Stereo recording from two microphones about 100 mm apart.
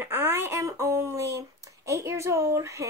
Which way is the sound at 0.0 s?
25° right (ahead or behind).